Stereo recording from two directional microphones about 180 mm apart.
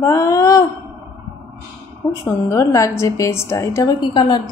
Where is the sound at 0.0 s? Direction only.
20° left (ahead or behind).